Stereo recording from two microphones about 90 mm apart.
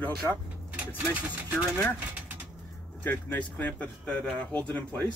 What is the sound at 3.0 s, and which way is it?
Speech, 20° left (ahead or behind).